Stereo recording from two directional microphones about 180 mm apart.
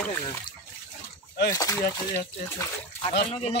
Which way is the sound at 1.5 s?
20° left (ahead or behind).